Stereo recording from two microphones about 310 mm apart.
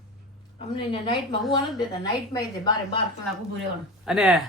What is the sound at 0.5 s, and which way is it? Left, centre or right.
Speech, centre.